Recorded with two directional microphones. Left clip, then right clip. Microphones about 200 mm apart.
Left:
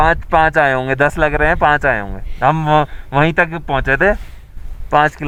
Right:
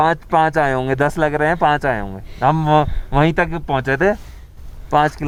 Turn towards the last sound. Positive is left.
turn(degrees=0)  # may be behind; listen again after turning